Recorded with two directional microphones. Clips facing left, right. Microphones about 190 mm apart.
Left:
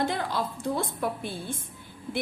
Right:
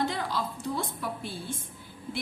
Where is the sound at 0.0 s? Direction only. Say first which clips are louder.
Left 2 dB; 55° left (ahead or behind).